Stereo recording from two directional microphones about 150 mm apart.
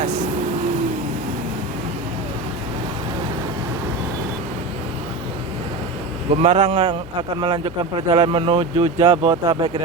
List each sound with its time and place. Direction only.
6.3 s a man's voice: 45° right (ahead or behind); by 9.6 s 30° right (ahead or behind)